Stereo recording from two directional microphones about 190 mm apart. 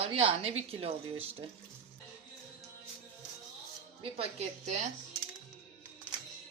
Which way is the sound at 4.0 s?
30° right (ahead or behind).